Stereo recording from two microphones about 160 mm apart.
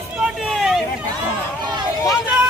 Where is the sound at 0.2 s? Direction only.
Centre (ahead or behind).